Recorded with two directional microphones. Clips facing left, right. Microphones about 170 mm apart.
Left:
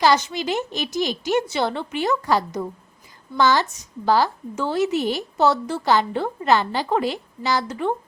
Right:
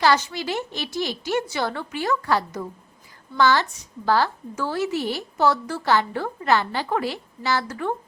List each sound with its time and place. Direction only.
0.0 s a woman's voice: 20° left (ahead or behind)